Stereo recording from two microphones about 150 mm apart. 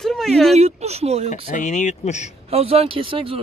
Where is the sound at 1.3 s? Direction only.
55° left (ahead or behind).